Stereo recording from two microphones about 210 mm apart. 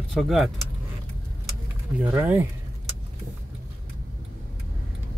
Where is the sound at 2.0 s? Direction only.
10° right (ahead or behind).